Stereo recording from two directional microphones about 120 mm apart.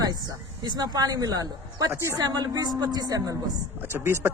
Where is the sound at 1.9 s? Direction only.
20° right (ahead or behind).